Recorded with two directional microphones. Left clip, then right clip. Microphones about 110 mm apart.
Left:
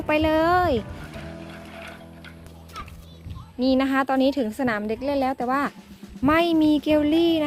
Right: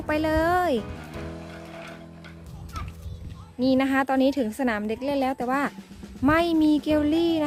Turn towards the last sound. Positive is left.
turn(degrees=-15)  # may be behind; listen again after turning